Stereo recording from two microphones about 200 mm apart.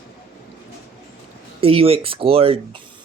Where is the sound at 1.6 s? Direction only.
30° right (ahead or behind).